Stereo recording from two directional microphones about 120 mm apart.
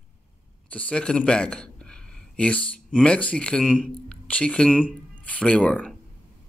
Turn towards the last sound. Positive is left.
turn(degrees=10)  # may be behind; listen again after turning